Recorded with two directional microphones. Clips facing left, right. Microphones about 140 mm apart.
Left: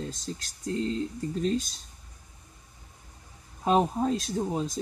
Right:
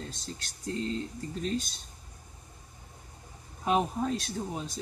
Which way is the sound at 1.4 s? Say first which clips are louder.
Left 4 dB; 35° left (ahead or behind).